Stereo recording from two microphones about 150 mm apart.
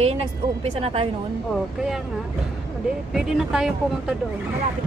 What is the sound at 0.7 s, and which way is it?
Speech, 40° right (ahead or behind).